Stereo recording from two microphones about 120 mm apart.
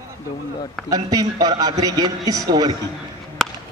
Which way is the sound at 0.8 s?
30° right (ahead or behind).